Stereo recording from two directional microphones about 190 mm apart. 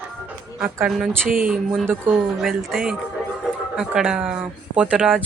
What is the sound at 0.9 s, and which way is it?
A woman's voice, centre (ahead or behind).